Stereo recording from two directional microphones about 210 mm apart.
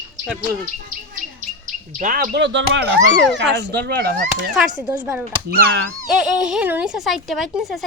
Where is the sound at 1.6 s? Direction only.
40° right (ahead or behind).